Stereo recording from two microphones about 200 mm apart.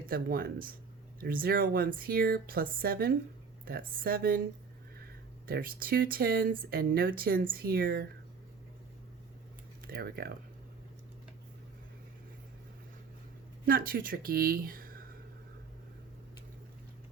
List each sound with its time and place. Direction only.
0.1 s speech: 45° right (ahead or behind)
5.5 s speech: 45° right (ahead or behind)
9.8 s speech: 50° right (ahead or behind)
13.7 s speech: 45° right (ahead or behind)